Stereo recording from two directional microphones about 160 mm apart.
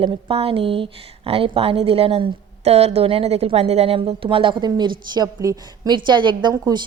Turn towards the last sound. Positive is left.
turn(degrees=-25)  # may be behind; listen again after turning